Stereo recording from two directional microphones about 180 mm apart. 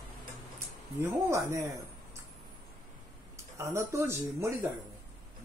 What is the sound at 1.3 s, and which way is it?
Speech, 20° right (ahead or behind).